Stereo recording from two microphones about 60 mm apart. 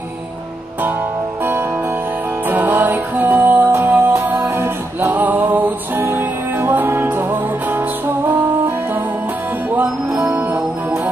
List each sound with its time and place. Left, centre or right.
2.5 s music: right